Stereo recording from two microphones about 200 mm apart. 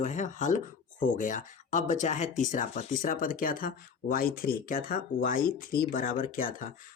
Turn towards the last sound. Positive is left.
turn(degrees=40)  # may be behind; listen again after turning